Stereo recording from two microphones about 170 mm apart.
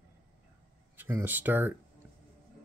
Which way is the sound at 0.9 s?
15° right (ahead or behind).